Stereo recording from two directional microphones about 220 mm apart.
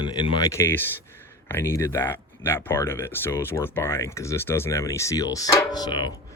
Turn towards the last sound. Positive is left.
turn(degrees=20)  # may be behind; listen again after turning